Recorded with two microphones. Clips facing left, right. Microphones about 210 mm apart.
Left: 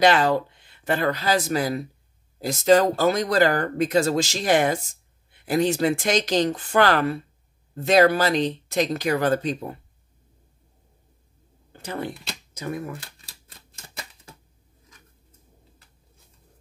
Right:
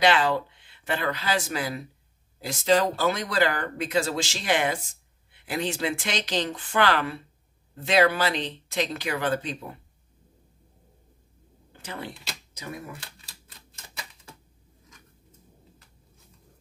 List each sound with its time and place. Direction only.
0.0 s speech: 40° left (ahead or behind)
11.7 s speech: 40° left (ahead or behind)